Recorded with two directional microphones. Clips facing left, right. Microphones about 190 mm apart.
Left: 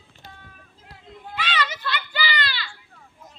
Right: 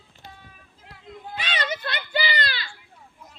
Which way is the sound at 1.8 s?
45° right (ahead or behind).